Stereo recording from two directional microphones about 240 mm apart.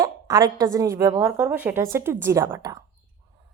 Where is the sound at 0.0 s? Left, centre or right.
Centre.